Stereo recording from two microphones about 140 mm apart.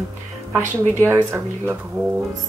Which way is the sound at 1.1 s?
15° right (ahead or behind).